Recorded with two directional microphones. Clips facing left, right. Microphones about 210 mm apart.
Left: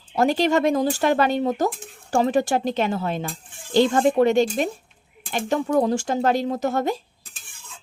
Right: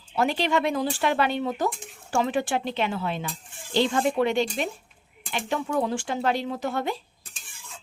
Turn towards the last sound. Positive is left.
turn(degrees=45)  # may be behind; listen again after turning